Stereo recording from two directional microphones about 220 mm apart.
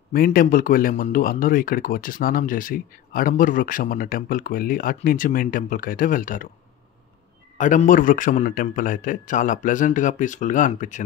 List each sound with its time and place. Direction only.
0.1 s speech: 40° left (ahead or behind)
7.5 s speech: 35° left (ahead or behind)